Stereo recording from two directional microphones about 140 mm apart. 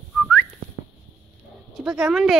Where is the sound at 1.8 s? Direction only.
5° right (ahead or behind).